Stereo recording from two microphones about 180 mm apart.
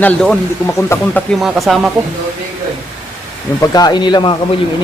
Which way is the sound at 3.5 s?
20° left (ahead or behind).